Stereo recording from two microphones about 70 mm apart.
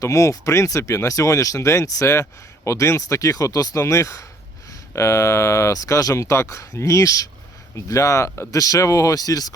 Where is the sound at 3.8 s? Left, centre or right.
Left.